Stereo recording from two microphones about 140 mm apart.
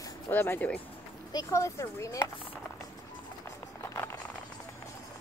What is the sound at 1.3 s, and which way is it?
Speech, 20° left (ahead or behind).